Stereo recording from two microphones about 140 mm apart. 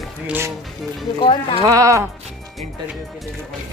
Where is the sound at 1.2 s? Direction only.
40° left (ahead or behind).